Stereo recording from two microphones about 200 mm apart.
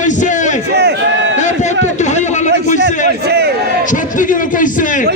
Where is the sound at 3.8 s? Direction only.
40° left (ahead or behind).